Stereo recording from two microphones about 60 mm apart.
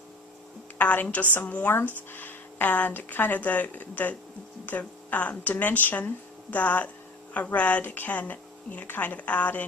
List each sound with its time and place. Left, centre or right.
0.8 s a woman's voice: left